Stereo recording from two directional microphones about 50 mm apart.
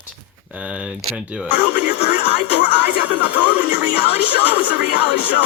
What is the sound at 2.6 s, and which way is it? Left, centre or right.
Music, right.